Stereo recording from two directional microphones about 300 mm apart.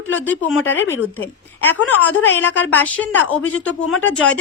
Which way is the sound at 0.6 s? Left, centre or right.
Left.